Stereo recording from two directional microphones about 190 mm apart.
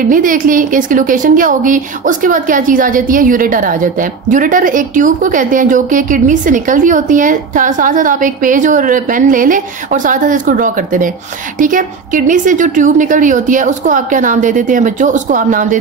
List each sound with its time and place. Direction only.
0.0 s a woman's voice: 45° right (ahead or behind)